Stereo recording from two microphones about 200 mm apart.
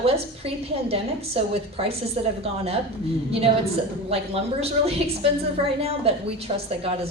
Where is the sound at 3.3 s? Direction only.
30° right (ahead or behind).